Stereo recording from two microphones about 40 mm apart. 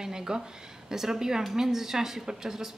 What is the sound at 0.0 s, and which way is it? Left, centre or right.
Speech, centre.